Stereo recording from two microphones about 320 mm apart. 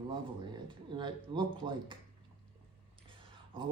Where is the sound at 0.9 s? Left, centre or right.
Centre.